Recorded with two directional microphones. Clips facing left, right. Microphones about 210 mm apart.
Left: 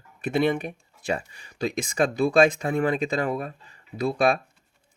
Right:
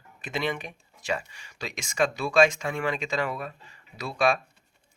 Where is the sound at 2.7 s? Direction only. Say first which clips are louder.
Left 5 dB; 40° left (ahead or behind).